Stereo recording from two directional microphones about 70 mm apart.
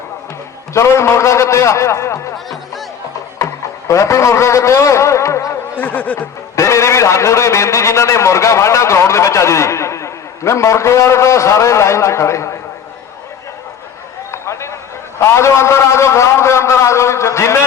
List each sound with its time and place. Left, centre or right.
0.7 s a man's voice: left
3.3 s speech: left
5.8 s speech: left
6.6 s a man's voice: left
14.3 s a sound: left
15.2 s a man's voice: left